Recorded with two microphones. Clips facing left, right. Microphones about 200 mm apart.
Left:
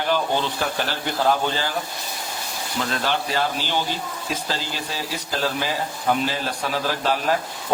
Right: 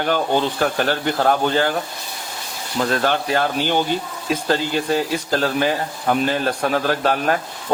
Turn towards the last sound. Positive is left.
turn(degrees=-55)  # may be behind; listen again after turning